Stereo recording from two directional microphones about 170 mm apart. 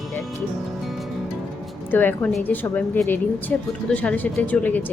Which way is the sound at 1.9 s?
10° left (ahead or behind).